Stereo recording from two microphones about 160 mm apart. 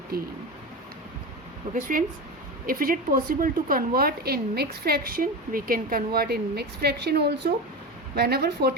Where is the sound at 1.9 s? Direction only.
60° right (ahead or behind).